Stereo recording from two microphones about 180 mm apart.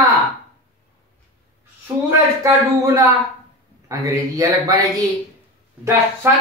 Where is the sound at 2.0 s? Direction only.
15° right (ahead or behind).